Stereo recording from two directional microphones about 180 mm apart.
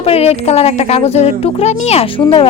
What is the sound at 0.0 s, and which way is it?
A woman's voice, 35° left (ahead or behind).